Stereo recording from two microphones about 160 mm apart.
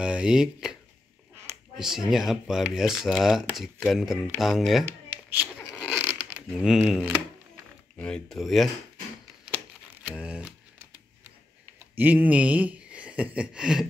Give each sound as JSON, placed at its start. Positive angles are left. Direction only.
{"t": 0.0, "sound": "speech", "side_deg": -5}
{"t": 1.8, "sound": "speech", "side_deg": 0}
{"t": 5.3, "sound": "zipper", "side_deg": -10}
{"t": 6.6, "sound": "speech", "side_deg": -5}
{"t": 10.0, "sound": "speech", "side_deg": -10}
{"t": 11.9, "sound": "speech", "side_deg": -10}